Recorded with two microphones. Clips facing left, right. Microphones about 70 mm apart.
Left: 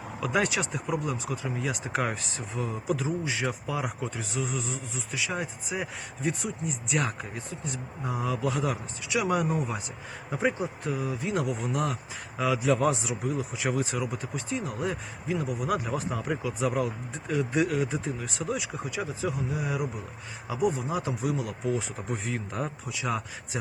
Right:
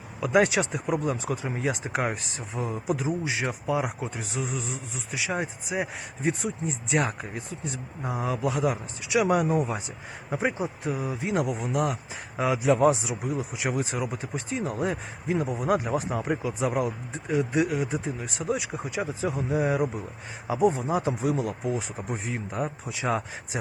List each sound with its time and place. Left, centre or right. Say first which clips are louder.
0.2 s speech: right 5 dB; right
8.0 s speech: right 2 dB; right
9.1 s speech: right 4 dB; right
10.3 s speech: even; centre
11.0 s speech: right 2 dB; right
11.6 s speech: right 3 dB; centre
12.4 s speech: right 3 dB; right
13.7 s speech: right 1 dB; right
17.5 s speech: right 1 dB; centre
18.2 s speech: right 2 dB; right
21.7 s speech: even; right
22.9 s speech: right 3 dB; right